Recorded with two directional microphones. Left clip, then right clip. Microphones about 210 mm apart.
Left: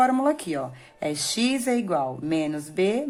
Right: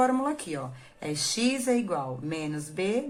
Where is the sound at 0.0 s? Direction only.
35° left (ahead or behind).